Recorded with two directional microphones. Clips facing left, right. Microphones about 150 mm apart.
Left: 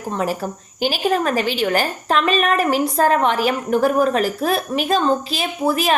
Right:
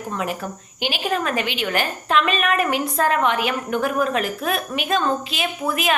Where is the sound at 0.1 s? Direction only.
35° left (ahead or behind).